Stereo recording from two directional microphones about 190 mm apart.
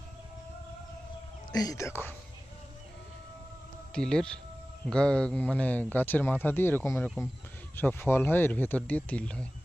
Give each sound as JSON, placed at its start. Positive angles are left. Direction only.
{"t": 1.5, "sound": "speech", "side_deg": 15}
{"t": 3.9, "sound": "speech", "side_deg": 5}